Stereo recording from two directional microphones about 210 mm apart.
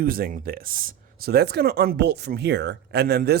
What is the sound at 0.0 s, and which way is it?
Speech, 45° right (ahead or behind).